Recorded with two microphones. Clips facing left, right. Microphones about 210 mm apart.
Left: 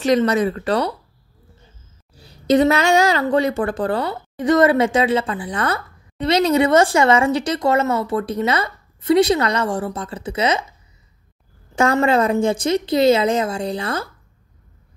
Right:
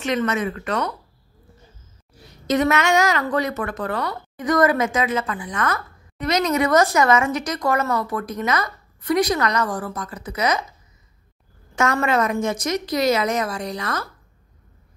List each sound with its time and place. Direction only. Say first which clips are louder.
0.0 s speech: left 6 dB; 35° left (ahead or behind)
2.1 s a woman's voice: left 5 dB; 30° left (ahead or behind)
11.7 s a woman's voice: left 4 dB; 30° left (ahead or behind)